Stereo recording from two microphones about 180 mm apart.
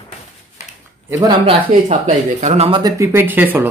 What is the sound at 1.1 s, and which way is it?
Speech, 20° right (ahead or behind).